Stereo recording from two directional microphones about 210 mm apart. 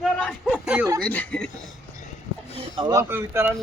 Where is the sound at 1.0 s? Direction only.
5° left (ahead or behind).